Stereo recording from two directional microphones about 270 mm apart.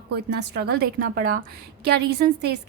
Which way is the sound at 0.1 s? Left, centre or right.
Right.